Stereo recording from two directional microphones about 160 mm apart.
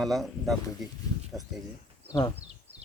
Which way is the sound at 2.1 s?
25° left (ahead or behind).